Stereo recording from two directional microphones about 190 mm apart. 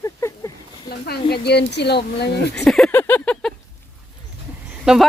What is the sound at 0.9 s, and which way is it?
Speech, 55° left (ahead or behind).